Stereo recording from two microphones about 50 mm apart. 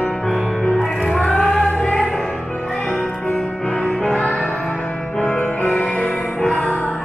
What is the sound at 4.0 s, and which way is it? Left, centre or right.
Music, centre.